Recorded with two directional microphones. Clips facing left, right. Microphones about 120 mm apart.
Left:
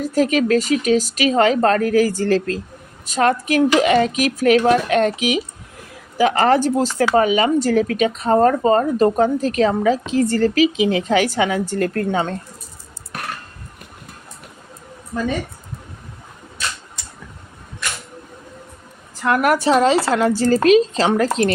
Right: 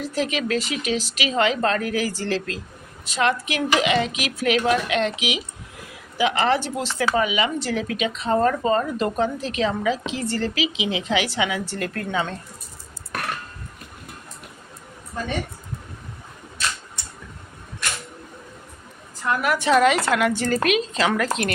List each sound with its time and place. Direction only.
0.0 s speech: 45° left (ahead or behind)
17.0 s a sound: 90° left
19.4 s speech: 40° left (ahead or behind)